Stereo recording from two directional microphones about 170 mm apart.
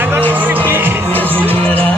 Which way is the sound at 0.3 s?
10° right (ahead or behind).